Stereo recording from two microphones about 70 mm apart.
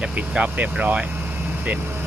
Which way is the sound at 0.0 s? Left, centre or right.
Centre.